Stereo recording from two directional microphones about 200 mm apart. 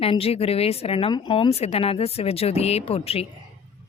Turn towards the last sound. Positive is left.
turn(degrees=30)  # may be behind; listen again after turning